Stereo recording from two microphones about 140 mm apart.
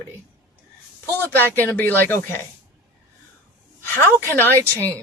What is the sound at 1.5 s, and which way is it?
Speech, 15° left (ahead or behind).